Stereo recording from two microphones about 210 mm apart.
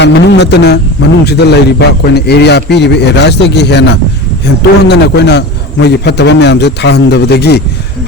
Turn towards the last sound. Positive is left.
turn(degrees=50)  # may be behind; listen again after turning